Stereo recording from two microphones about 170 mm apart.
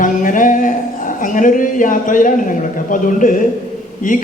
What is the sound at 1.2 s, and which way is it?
A man's voice, 50° left (ahead or behind).